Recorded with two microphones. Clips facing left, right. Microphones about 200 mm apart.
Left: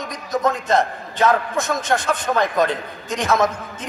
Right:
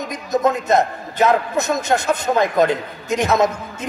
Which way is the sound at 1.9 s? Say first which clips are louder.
Right 2 dB; 20° right (ahead or behind).